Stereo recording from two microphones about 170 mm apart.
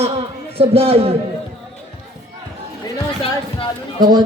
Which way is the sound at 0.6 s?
35° right (ahead or behind).